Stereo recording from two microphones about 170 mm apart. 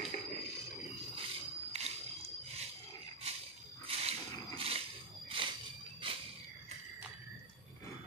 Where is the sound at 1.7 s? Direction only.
40° right (ahead or behind).